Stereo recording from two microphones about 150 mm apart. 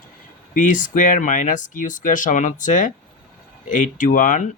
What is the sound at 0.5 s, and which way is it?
Speech, 60° left (ahead or behind).